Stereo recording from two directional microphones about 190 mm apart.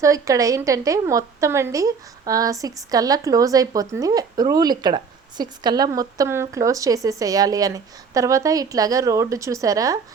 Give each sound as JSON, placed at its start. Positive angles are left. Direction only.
{"t": 0.0, "sound": "a woman's voice", "side_deg": -15}